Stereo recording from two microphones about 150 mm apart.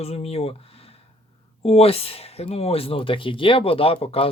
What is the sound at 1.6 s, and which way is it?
A man's voice, 40° left (ahead or behind).